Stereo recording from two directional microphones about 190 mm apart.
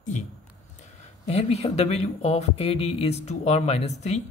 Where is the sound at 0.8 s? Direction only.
35° left (ahead or behind).